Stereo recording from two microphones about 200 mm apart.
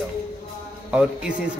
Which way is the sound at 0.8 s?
5° right (ahead or behind).